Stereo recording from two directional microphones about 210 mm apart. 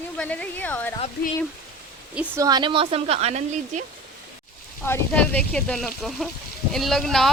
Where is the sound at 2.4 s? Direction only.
20° right (ahead or behind).